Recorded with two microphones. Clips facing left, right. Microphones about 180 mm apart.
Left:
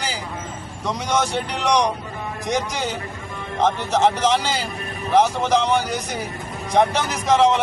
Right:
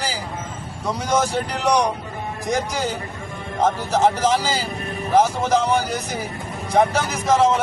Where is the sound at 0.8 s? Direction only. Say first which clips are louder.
Right 1 dB; 5° right (ahead or behind).